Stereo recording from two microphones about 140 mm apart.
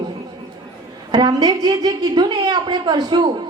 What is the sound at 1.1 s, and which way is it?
A woman's voice, 30° right (ahead or behind).